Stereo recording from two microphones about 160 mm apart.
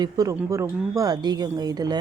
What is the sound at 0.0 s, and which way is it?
Speech, 20° right (ahead or behind).